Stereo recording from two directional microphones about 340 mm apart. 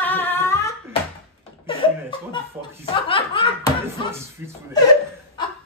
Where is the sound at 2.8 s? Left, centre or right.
Centre.